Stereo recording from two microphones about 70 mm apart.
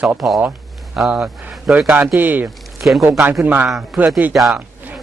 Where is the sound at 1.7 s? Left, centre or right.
Right.